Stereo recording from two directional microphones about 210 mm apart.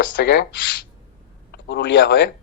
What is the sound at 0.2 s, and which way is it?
Speech, 55° left (ahead or behind).